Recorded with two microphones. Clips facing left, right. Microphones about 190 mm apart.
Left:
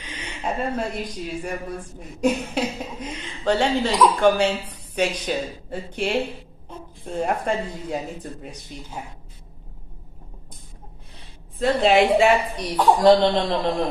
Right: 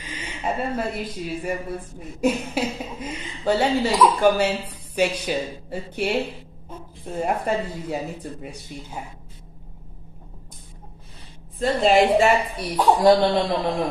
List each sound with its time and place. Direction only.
0.0 s a woman's voice: 10° right (ahead or behind)
11.5 s a woman's voice: centre (ahead or behind)